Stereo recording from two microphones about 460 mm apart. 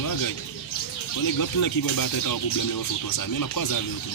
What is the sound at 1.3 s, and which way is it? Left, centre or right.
Speech, left.